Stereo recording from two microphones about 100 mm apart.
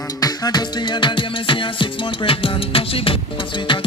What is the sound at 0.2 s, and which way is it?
Music, 40° left (ahead or behind).